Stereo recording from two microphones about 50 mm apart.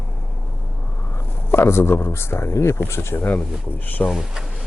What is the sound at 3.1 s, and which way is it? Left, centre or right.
Speech, left.